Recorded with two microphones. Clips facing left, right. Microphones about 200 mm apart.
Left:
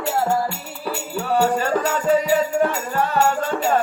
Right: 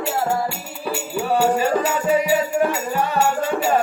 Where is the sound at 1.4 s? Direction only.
5° right (ahead or behind).